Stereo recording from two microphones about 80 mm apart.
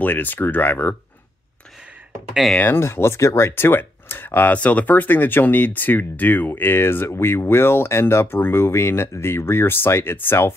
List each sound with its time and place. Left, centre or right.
0.0 s speech: left
2.5 s speech: left